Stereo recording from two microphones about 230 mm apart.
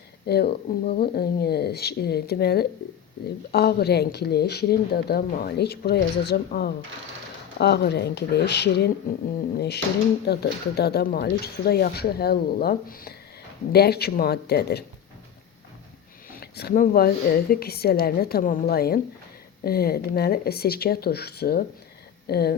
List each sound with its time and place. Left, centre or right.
0.3 s speech: left
16.3 s speech: left